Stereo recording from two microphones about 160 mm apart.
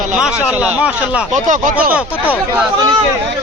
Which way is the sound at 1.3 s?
50° right (ahead or behind).